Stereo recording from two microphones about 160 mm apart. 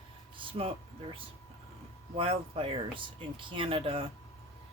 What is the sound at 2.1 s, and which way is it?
Speech, 35° right (ahead or behind).